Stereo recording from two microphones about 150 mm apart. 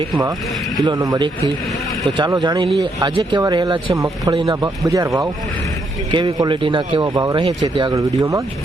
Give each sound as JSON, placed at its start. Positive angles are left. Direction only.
{"t": 0.9, "sound": "a man's voice", "side_deg": -25}
{"t": 6.1, "sound": "a man's voice", "side_deg": -30}